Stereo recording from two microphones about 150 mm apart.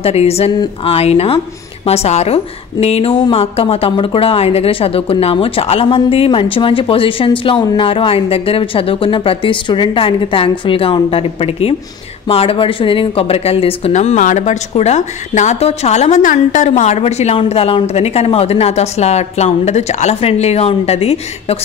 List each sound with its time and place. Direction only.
0.0 s a woman's voice: 45° left (ahead or behind)